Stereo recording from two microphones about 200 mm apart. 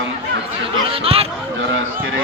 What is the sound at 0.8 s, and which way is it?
Speech, 30° right (ahead or behind).